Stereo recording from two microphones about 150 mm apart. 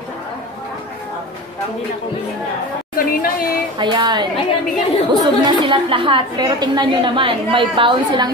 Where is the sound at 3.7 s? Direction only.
30° right (ahead or behind).